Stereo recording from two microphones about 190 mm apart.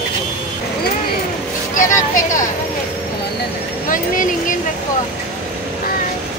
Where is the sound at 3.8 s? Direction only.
45° left (ahead or behind).